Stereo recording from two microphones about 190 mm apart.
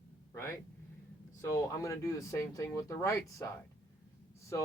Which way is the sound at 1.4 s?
15° left (ahead or behind).